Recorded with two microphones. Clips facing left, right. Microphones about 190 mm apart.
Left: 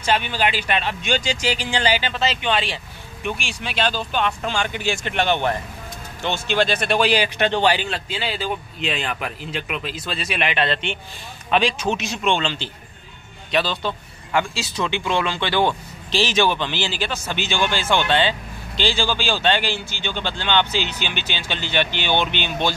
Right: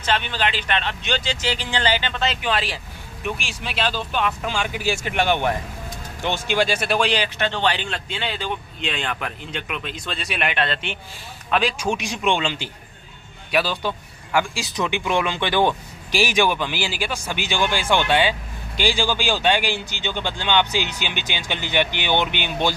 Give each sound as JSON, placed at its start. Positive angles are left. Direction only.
{"t": 0.0, "sound": "speech", "side_deg": 10}
{"t": 7.3, "sound": "speech", "side_deg": 15}